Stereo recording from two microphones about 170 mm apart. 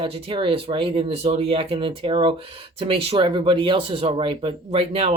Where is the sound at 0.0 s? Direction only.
35° right (ahead or behind).